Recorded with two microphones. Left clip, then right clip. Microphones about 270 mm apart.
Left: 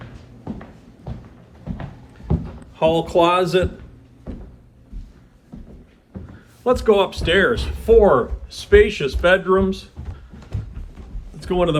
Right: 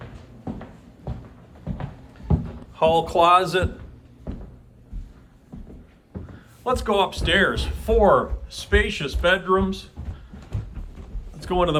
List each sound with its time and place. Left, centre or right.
2.7 s speech: centre
6.7 s speech: centre
11.3 s a man's voice: centre